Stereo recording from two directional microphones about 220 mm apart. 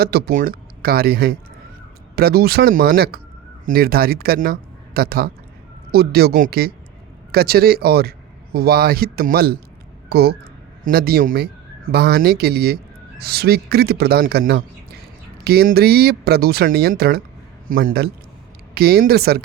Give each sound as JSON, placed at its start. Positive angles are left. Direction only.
{"t": 0.0, "sound": "a man's voice", "side_deg": -45}